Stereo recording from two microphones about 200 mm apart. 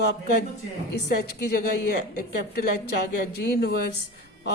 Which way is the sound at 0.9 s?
55° left (ahead or behind).